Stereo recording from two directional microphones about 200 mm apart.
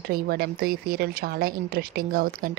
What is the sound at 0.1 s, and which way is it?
A woman's voice, 50° right (ahead or behind).